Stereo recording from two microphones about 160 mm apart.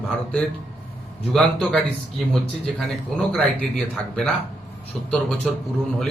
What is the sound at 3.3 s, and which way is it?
Speech, 5° left (ahead or behind).